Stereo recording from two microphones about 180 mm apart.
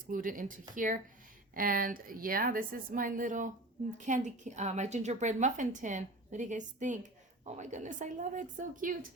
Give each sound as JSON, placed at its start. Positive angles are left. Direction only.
{"t": 0.1, "sound": "a woman's voice", "side_deg": -50}
{"t": 1.5, "sound": "a woman's voice", "side_deg": -50}